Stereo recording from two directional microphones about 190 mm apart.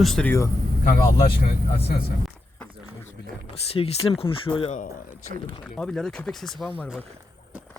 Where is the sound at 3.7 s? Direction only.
30° left (ahead or behind).